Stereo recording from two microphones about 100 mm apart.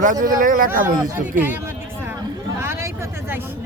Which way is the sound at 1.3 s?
20° right (ahead or behind).